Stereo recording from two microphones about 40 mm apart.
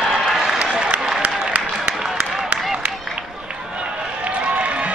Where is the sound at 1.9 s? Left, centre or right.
Centre.